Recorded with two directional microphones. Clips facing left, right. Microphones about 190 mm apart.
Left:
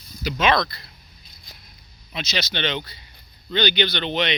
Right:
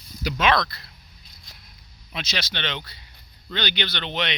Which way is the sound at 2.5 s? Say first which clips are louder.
Left 5 dB; centre (ahead or behind).